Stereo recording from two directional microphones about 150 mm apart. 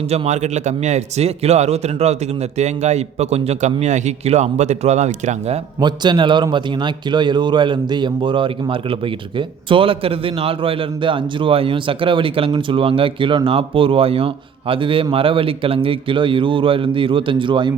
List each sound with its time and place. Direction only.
0.1 s a man's voice: 50° right (ahead or behind)
5.8 s a man's voice: 30° right (ahead or behind)